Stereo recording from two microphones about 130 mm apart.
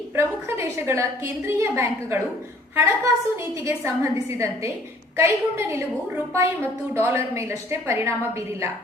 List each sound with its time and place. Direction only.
0.2 s a woman's voice: 20° right (ahead or behind)